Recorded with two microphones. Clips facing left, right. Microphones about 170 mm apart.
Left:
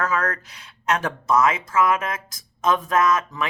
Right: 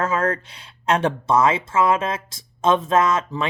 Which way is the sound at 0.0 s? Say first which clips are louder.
Right 3 dB; 30° right (ahead or behind).